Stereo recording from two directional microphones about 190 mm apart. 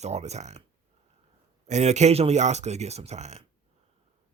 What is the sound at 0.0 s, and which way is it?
Speech, 35° right (ahead or behind).